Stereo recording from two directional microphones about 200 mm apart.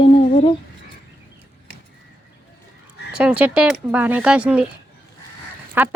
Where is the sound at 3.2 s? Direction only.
5° right (ahead or behind).